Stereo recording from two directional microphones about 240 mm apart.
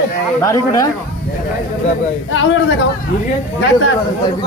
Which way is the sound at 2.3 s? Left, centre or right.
Left.